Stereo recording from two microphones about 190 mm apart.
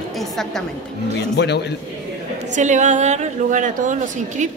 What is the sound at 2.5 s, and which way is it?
A woman's voice, 40° right (ahead or behind).